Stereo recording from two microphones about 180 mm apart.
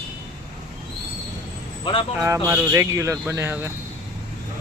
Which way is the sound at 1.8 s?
30° left (ahead or behind).